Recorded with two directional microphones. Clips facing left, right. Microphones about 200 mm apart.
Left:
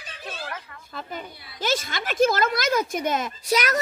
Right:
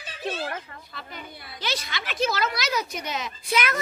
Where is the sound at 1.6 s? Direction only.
45° left (ahead or behind).